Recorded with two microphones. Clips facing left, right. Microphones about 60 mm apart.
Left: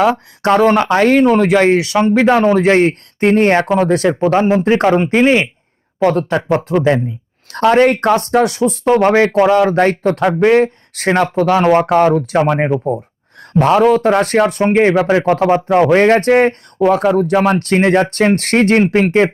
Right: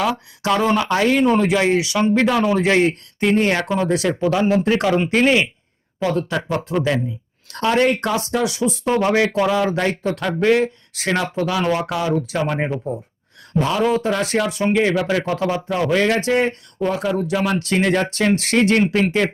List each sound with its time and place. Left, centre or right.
0.0 s speech: left
2.2 s speech: left
6.7 s speech: left
7.5 s speech: left
12.5 s speech: left